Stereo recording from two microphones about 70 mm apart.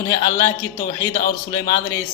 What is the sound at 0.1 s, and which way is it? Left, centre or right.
A man's voice, left.